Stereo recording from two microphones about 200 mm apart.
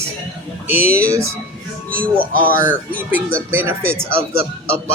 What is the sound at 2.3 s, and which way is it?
Speech, 45° right (ahead or behind).